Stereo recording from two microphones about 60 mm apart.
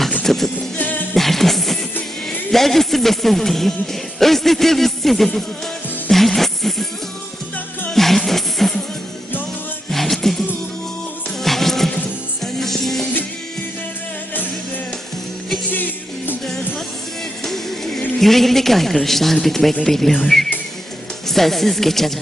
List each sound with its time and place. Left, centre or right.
0.2 s music: centre
0.8 s music: left
1.1 s music: centre
2.5 s a man's voice: centre
6.1 s music: centre
7.9 s music: centre
9.9 s music: centre
11.4 s music: centre
15.7 s music: left
17.4 s music: centre
18.2 s a man's voice: centre